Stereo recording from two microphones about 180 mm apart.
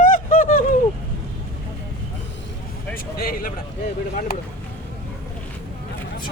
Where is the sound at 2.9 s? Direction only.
55° left (ahead or behind).